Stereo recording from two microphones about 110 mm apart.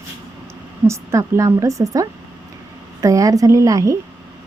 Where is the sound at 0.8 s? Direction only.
25° right (ahead or behind).